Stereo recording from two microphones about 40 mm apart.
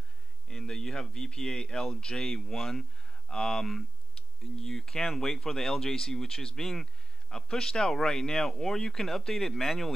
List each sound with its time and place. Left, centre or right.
0.5 s speech: centre